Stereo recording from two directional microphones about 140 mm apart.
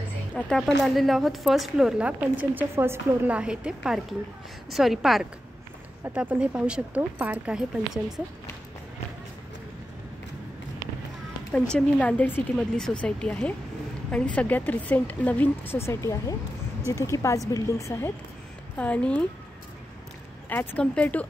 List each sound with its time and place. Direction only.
0.3 s speech: 5° left (ahead or behind)
11.7 s a woman's voice: 10° left (ahead or behind)
20.4 s a woman's voice: 10° left (ahead or behind)